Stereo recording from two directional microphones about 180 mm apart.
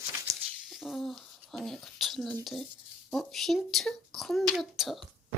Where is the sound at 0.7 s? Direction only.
Centre (ahead or behind).